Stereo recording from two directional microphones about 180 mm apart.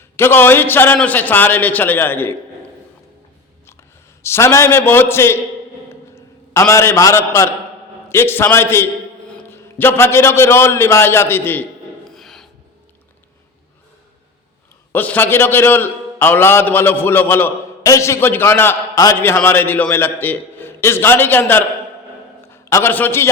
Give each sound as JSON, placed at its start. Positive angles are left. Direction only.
{"t": 0.2, "sound": "a man's voice", "side_deg": 10}
{"t": 4.2, "sound": "a man's voice", "side_deg": 15}
{"t": 5.9, "sound": "a sound", "side_deg": 15}
{"t": 8.1, "sound": "a man's voice", "side_deg": 10}
{"t": 12.1, "sound": "a sound", "side_deg": 0}
{"t": 14.9, "sound": "a man's voice", "side_deg": 10}